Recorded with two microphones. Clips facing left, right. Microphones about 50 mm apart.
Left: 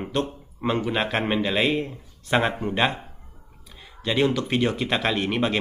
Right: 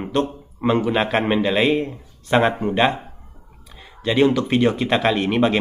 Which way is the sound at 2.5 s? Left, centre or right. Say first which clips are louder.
Right 5 dB; centre.